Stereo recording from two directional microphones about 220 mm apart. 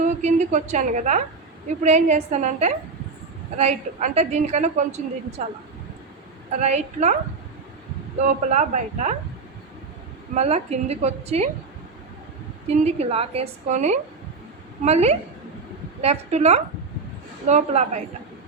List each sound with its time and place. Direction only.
0.0 s a woman's voice: 30° right (ahead or behind)
6.6 s a woman's voice: 30° right (ahead or behind)
8.2 s a woman's voice: 35° right (ahead or behind)
10.3 s a woman's voice: 30° right (ahead or behind)
12.6 s a woman's voice: 30° right (ahead or behind)